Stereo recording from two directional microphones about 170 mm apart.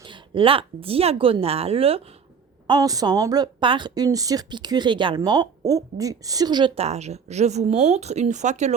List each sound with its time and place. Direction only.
0.0 s speech: 30° right (ahead or behind)
2.6 s a woman's voice: 20° right (ahead or behind); by 8.7 s 45° right (ahead or behind)